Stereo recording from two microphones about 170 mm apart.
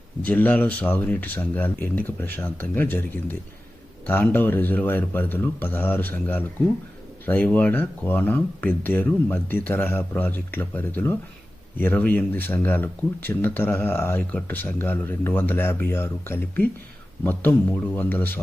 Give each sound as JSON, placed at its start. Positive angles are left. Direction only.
{"t": 0.3, "sound": "speech", "side_deg": 10}